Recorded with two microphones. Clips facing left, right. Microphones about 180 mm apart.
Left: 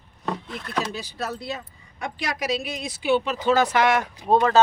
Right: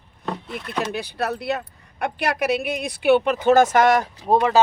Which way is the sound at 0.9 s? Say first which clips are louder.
Right 5 dB; 60° right (ahead or behind).